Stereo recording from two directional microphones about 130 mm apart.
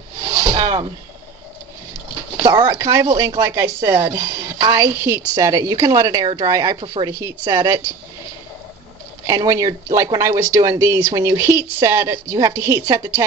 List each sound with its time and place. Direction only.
0.2 s a sound: 35° right (ahead or behind)
2.4 s speech: 35° right (ahead or behind)
9.2 s speech: 25° right (ahead or behind)